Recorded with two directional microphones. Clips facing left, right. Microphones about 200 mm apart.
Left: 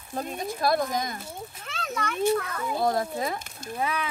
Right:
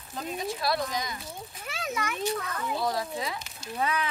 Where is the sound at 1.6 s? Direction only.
Centre (ahead or behind).